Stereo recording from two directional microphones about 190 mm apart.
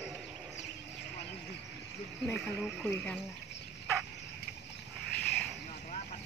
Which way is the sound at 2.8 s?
10° left (ahead or behind).